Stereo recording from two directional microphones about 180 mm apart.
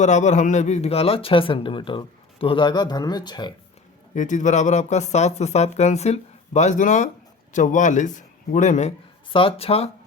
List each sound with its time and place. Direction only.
0.0 s speech: 40° left (ahead or behind); by 3.5 s 25° left (ahead or behind)
4.1 s speech: 45° left (ahead or behind)
9.3 s speech: 30° left (ahead or behind)